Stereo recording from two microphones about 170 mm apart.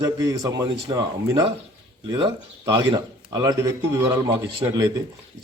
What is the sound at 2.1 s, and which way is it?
A man's voice, 25° right (ahead or behind).